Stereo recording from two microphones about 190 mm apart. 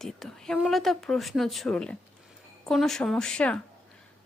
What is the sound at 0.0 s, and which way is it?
A woman's voice, centre (ahead or behind).